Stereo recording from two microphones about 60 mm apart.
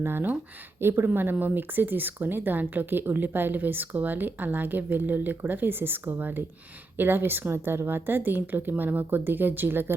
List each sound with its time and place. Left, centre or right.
0.0 s speech: right